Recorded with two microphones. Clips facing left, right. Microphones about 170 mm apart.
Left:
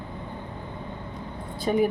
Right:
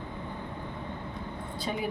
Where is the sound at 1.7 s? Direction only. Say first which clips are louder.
Left 10 dB; 45° left (ahead or behind).